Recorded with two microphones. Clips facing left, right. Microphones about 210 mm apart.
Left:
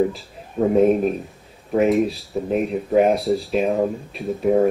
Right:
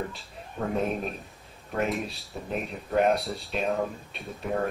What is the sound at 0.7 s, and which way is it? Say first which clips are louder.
Speech: left 13 dB; 45° left (ahead or behind).